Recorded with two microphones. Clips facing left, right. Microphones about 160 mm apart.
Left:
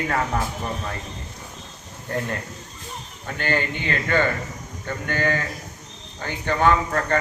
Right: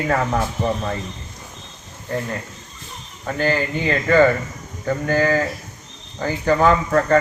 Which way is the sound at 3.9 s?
40° right (ahead or behind).